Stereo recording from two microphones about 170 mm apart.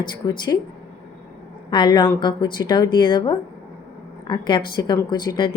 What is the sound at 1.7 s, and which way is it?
A woman's voice, 25° left (ahead or behind).